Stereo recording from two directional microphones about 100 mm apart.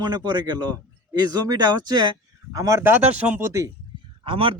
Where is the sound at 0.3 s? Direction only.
45° right (ahead or behind); by 3.4 s 15° right (ahead or behind).